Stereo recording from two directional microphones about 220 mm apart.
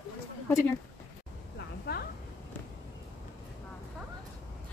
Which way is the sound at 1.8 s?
45° left (ahead or behind).